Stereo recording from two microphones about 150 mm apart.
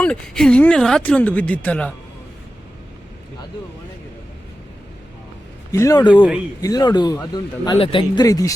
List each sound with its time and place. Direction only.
0.0 s speech: 5° left (ahead or behind)
5.7 s speech: 20° left (ahead or behind)
6.0 s speech: 30° left (ahead or behind)